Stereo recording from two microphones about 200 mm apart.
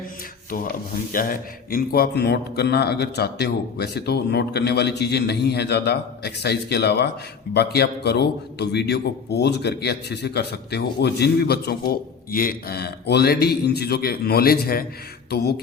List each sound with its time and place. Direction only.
1.1 s a man's voice: 45° left (ahead or behind)